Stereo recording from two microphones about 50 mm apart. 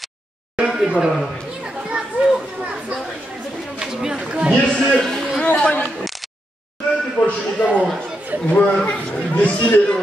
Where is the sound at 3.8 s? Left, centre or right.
Centre.